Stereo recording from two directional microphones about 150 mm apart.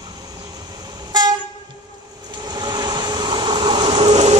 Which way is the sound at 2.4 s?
25° right (ahead or behind).